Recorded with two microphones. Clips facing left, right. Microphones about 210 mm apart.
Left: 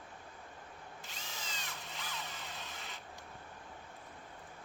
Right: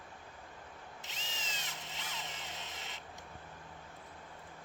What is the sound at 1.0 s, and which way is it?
Drill, 20° right (ahead or behind).